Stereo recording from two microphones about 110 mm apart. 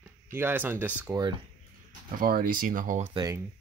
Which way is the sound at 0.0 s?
20° right (ahead or behind).